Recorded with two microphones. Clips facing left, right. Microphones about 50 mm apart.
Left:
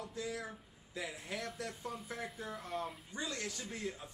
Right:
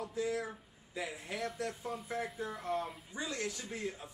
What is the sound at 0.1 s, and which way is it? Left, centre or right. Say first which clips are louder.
Speech: right 8 dB; centre.